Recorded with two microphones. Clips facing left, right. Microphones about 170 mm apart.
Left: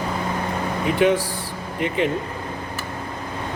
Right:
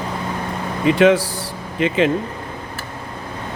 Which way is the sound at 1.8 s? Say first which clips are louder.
Right 5 dB; 90° right.